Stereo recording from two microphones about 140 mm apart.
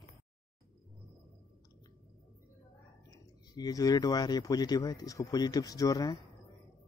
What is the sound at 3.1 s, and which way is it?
Speech, 30° left (ahead or behind).